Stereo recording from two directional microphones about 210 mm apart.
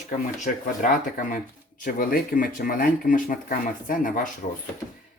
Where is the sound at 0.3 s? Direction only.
35° left (ahead or behind).